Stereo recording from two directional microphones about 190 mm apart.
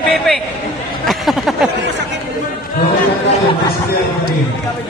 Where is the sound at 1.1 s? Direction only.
Centre (ahead or behind).